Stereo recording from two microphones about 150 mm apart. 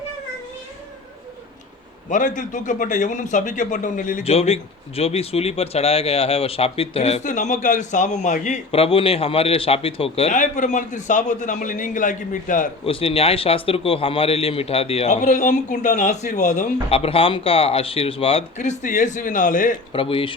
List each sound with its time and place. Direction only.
2.0 s a man's voice: 60° left (ahead or behind)
4.2 s speech: 40° left (ahead or behind)
8.7 s a man's voice: 40° left (ahead or behind)
10.3 s a man's voice: 55° left (ahead or behind)
12.8 s a man's voice: 40° left (ahead or behind)
16.9 s a man's voice: 40° left (ahead or behind); by 19.7 s 60° left (ahead or behind)
19.9 s a man's voice: 35° left (ahead or behind)